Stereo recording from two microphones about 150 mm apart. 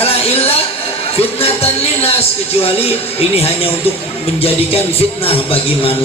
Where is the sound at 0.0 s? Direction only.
40° left (ahead or behind).